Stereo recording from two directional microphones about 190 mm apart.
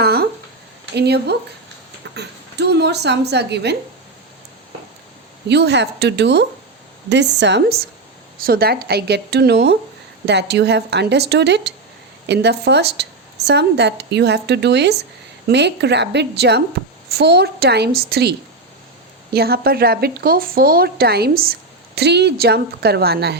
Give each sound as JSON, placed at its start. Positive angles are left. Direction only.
{"t": 0.0, "sound": "a sound", "side_deg": -55}
{"t": 0.9, "sound": "speech", "side_deg": -60}
{"t": 5.5, "sound": "speech", "side_deg": -65}